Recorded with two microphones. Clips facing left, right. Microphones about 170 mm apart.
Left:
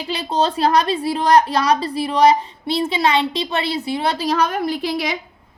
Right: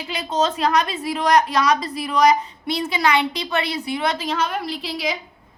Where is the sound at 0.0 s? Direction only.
30° left (ahead or behind); by 4.9 s 50° left (ahead or behind).